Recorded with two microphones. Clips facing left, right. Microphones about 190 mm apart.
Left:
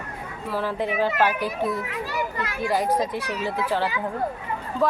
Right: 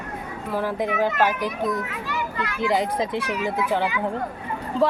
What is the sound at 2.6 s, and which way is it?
Speech, 20° right (ahead or behind).